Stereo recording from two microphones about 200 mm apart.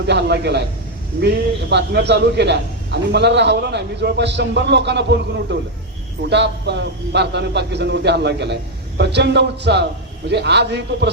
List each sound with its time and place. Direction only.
0.1 s a man's voice: 60° right (ahead or behind)
1.7 s a man's voice: 60° right (ahead or behind)